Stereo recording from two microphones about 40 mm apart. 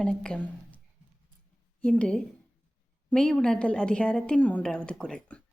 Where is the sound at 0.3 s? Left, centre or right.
Left.